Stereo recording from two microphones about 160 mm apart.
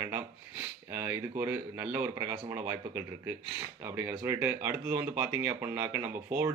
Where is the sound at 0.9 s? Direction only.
15° right (ahead or behind).